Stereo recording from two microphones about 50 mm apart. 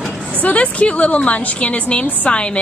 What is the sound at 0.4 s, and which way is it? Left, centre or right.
A woman's voice, left.